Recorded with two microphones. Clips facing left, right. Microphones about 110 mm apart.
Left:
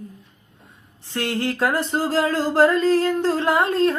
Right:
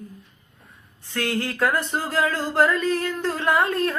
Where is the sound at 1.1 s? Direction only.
25° left (ahead or behind).